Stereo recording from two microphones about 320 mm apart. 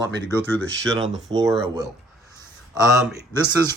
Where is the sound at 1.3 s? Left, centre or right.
Centre.